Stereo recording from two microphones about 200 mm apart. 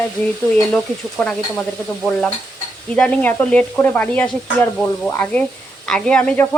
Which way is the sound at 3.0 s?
5° left (ahead or behind).